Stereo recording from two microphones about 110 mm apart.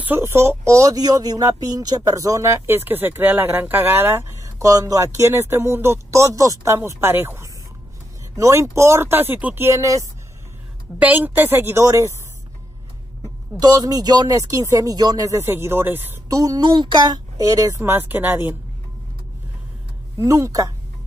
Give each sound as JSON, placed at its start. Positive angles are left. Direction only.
{"t": 0.0, "sound": "speech", "side_deg": -20}
{"t": 9.7, "sound": "speech", "side_deg": -30}
{"t": 11.0, "sound": "speech", "side_deg": -15}
{"t": 13.6, "sound": "speech", "side_deg": -35}
{"t": 16.3, "sound": "speech", "side_deg": -30}
{"t": 20.2, "sound": "speech", "side_deg": -30}